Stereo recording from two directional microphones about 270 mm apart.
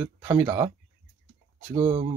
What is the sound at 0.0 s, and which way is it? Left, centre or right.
Speech, centre.